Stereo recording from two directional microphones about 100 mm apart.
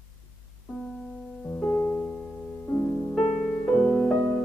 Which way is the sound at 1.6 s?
20° left (ahead or behind).